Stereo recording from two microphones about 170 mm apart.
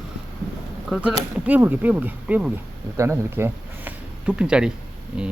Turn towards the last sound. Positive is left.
turn(degrees=-5)  # may be behind; listen again after turning